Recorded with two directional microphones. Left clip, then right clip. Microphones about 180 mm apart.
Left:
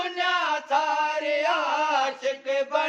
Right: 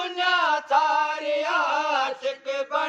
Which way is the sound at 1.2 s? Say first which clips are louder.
Even; 20° left (ahead or behind).